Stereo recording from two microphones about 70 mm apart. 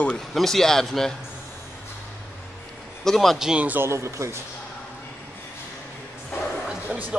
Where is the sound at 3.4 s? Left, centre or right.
Centre.